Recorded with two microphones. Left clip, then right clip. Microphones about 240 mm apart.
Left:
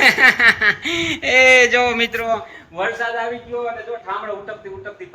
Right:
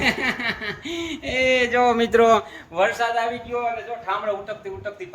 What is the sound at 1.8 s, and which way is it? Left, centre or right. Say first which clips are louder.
Speech: right 2 dB; right.